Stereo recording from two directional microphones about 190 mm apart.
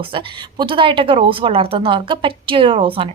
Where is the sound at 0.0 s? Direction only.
25° right (ahead or behind).